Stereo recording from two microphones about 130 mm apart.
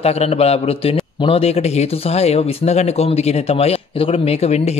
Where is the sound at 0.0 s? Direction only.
50° left (ahead or behind).